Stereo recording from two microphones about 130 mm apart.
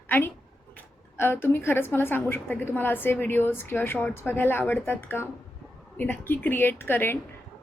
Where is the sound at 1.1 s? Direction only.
15° left (ahead or behind).